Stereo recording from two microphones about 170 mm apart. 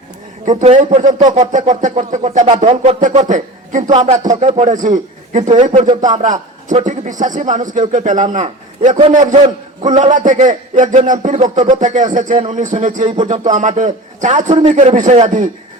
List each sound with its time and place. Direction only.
0.5 s a man's voice: 40° right (ahead or behind)